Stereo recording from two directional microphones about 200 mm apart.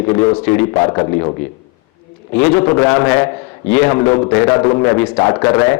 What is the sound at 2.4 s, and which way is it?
A man's voice, 10° left (ahead or behind).